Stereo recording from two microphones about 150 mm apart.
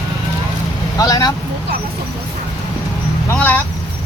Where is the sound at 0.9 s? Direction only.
25° left (ahead or behind).